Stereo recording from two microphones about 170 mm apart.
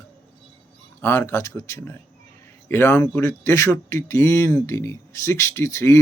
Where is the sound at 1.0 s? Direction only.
15° left (ahead or behind).